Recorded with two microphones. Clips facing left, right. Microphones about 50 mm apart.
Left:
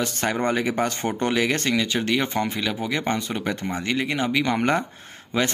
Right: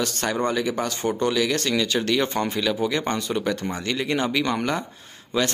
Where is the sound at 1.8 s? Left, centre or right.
Centre.